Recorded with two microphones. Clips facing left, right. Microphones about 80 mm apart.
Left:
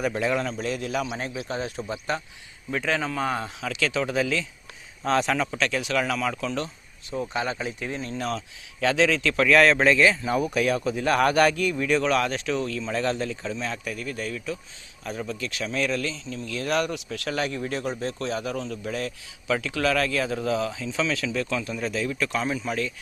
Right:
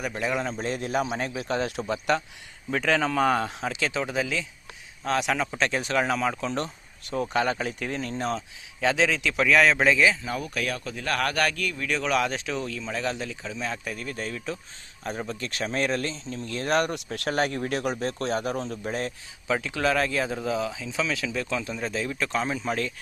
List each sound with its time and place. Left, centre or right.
0.2 s a man's voice: centre
0.5 s speech: right
1.5 s speech: right
2.7 s speech: right
3.6 s a man's voice: right; by 5.5 s centre
5.5 s speech: right
7.1 s speech: right
8.1 s a man's voice: right; by 10.3 s centre
10.3 s speech: centre
12.1 s a man's voice: centre
13.8 s speech: right
18.5 s speech: right
19.5 s speech: centre
20.4 s a man's voice: centre; by 22.9 s right